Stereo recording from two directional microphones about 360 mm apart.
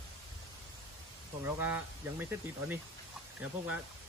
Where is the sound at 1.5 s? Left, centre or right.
Centre.